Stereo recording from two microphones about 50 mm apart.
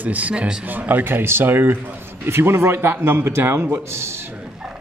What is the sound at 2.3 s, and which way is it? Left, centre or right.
Speech, right.